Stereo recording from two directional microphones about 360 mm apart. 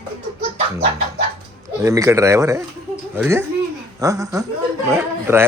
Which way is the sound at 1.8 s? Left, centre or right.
Centre.